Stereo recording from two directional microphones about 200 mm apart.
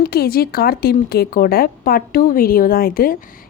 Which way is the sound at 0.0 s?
50° left (ahead or behind).